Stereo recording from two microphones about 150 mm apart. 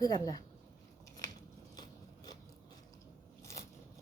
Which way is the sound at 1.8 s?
25° left (ahead or behind).